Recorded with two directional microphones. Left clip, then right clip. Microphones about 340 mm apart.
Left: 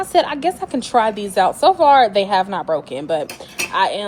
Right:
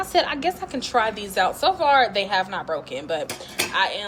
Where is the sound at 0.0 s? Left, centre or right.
Centre.